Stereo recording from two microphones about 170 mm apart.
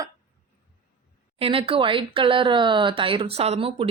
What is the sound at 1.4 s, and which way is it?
Speech, 30° right (ahead or behind).